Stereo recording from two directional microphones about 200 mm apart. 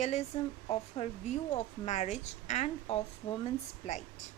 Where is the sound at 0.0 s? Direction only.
30° left (ahead or behind).